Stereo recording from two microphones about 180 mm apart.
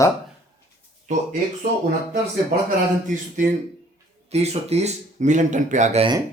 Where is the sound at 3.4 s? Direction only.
45° right (ahead or behind).